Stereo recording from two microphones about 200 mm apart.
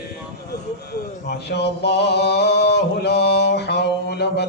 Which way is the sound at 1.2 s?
55° left (ahead or behind).